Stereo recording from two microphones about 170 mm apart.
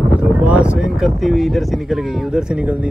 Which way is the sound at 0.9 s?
Centre (ahead or behind).